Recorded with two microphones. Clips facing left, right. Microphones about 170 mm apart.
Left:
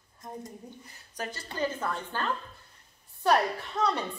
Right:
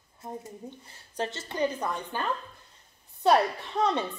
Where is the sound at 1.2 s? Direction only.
25° right (ahead or behind).